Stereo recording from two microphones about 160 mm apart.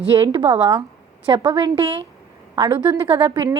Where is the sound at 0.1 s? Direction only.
35° right (ahead or behind).